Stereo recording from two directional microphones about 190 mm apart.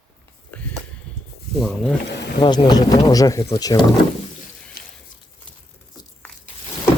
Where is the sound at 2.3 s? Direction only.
25° left (ahead or behind).